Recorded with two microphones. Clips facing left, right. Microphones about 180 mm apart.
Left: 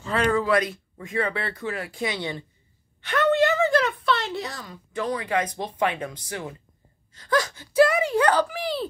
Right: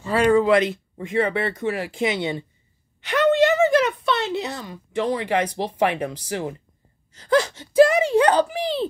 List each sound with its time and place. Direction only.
0.0 s speech: 5° right (ahead or behind)
0.3 s speech: 25° right (ahead or behind)